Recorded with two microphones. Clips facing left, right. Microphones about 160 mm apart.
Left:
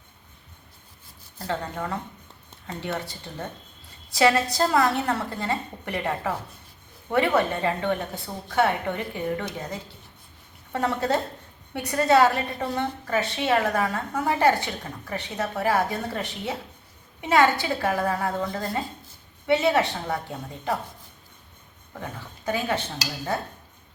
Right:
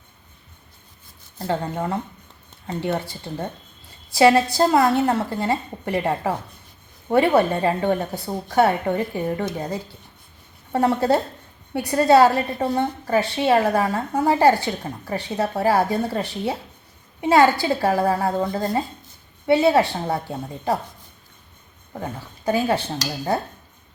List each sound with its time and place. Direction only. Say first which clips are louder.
1.5 s a woman's voice: right 5 dB; 25° right (ahead or behind)
21.9 s a woman's voice: right 5 dB; 35° right (ahead or behind)